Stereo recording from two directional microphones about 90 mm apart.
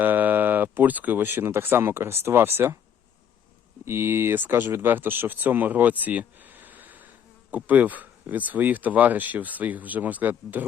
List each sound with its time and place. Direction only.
0.0 s speech: 20° right (ahead or behind)
3.8 s speech: 25° right (ahead or behind)